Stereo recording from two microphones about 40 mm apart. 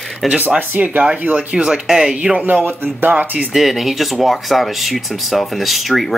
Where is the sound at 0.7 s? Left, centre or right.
Right.